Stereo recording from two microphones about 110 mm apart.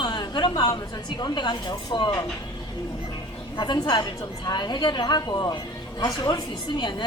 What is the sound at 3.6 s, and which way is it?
A woman's voice, 40° left (ahead or behind).